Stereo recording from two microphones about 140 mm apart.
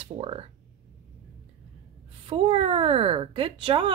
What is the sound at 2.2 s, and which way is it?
Speech, 45° right (ahead or behind).